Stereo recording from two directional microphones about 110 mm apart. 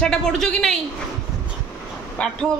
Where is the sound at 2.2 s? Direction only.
10° left (ahead or behind).